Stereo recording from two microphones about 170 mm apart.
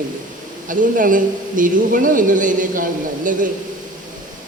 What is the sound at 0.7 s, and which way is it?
A woman's voice, 50° right (ahead or behind).